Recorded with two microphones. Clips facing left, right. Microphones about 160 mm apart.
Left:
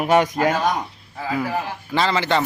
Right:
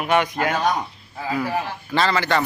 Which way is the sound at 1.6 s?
15° left (ahead or behind).